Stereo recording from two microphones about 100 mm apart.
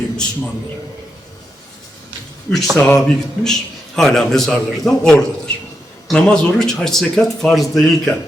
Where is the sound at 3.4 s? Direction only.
5° left (ahead or behind).